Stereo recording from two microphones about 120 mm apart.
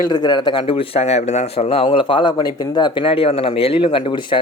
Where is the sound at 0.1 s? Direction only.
35° left (ahead or behind).